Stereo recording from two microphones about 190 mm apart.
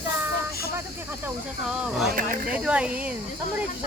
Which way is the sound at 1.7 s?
Centre (ahead or behind).